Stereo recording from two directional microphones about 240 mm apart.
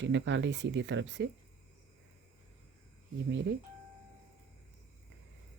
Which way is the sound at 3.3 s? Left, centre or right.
Right.